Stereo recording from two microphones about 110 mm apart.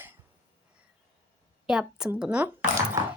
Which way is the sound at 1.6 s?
5° right (ahead or behind).